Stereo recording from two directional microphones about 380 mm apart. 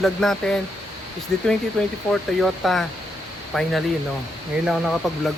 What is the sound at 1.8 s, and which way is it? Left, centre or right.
Speech, centre.